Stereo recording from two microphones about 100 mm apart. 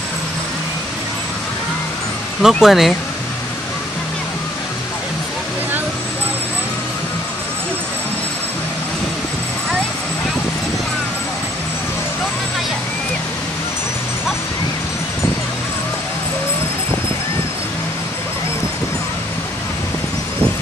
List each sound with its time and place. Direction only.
2.4 s speech: 5° right (ahead or behind)